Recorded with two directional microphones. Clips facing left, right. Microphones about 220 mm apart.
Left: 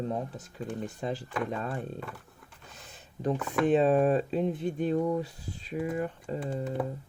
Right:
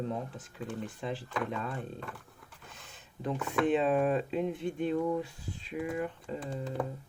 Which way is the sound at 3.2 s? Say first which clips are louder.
Left 3 dB; 40° left (ahead or behind).